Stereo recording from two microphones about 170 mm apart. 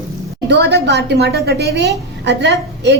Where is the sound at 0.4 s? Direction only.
90° right.